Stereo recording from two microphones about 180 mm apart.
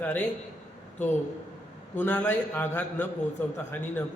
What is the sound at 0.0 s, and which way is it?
Speech, 10° left (ahead or behind).